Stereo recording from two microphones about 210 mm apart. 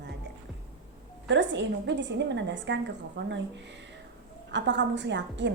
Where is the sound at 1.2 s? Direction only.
60° right (ahead or behind).